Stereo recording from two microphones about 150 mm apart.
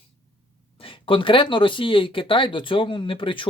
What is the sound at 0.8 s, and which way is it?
Speech, 35° left (ahead or behind).